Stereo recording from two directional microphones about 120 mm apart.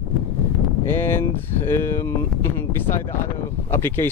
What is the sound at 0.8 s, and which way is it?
Speech, 20° left (ahead or behind).